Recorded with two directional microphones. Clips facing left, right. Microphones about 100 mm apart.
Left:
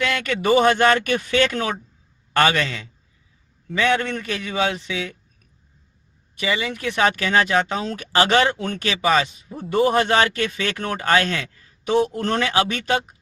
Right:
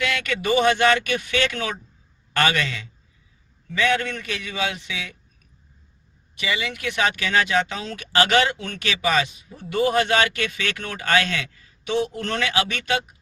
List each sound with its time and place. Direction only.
0.0 s speech: 35° left (ahead or behind)
6.4 s speech: 35° left (ahead or behind)